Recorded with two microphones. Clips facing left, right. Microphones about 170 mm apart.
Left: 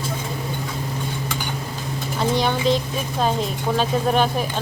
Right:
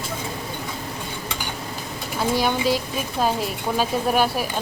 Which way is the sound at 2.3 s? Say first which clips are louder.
Left 1 dB; 5° right (ahead or behind).